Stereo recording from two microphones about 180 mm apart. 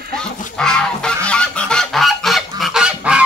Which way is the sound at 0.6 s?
5° left (ahead or behind).